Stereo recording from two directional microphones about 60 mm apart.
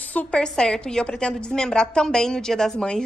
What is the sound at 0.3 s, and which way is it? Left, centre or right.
A woman's voice, centre.